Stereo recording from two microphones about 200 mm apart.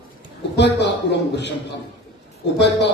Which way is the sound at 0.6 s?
60° left (ahead or behind).